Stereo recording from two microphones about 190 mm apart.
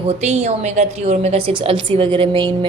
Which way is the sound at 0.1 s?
35° right (ahead or behind).